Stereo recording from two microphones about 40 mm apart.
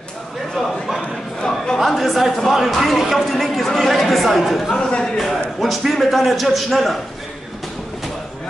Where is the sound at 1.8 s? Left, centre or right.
Centre.